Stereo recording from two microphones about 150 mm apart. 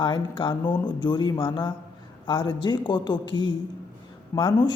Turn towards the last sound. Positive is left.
turn(degrees=25)  # may be behind; listen again after turning